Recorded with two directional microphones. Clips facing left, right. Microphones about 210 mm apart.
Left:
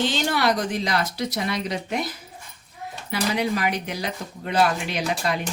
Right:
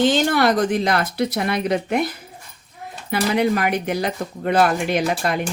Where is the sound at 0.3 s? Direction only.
50° right (ahead or behind).